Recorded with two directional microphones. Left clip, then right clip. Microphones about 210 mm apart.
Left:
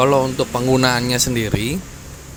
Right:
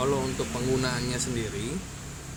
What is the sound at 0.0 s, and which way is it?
Speech, 35° left (ahead or behind).